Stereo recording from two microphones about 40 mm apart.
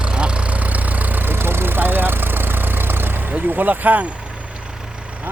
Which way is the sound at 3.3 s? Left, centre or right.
Right.